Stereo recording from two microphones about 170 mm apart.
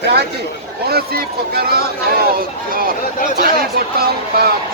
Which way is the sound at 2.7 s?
55° right (ahead or behind).